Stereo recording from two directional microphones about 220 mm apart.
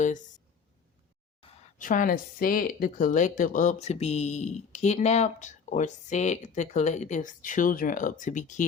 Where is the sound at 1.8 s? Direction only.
40° left (ahead or behind).